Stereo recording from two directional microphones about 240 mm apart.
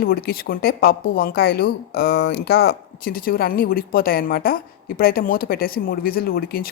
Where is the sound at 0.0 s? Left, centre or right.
Left.